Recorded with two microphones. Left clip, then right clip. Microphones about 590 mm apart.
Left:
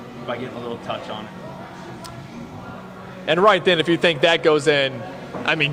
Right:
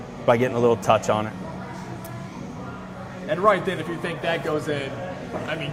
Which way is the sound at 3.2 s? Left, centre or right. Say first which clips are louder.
Left 5 dB; left.